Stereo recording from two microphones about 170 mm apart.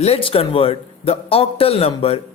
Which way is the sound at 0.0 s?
35° left (ahead or behind).